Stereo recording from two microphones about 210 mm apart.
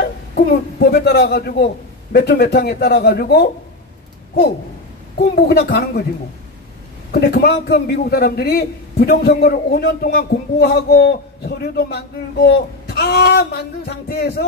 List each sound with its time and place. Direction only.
0.0 s a man's voice: 45° left (ahead or behind)
5.1 s a man's voice: 50° left (ahead or behind)
7.1 s a man's voice: 50° left (ahead or behind)